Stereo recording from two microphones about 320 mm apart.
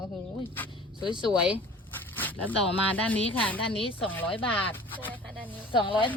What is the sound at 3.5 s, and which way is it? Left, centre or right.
Speech, centre.